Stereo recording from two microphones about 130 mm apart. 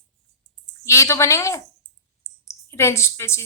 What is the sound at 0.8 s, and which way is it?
A woman's voice, 20° left (ahead or behind).